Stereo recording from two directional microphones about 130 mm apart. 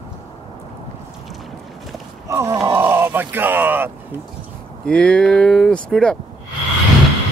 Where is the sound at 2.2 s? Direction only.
25° right (ahead or behind).